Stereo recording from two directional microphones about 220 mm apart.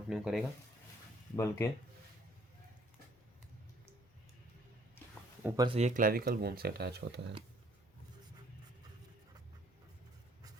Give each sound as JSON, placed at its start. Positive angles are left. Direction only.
{"t": 0.1, "sound": "speech", "side_deg": 0}
{"t": 1.4, "sound": "speech", "side_deg": 10}
{"t": 5.4, "sound": "speech", "side_deg": -10}
{"t": 5.6, "sound": "speech", "side_deg": -30}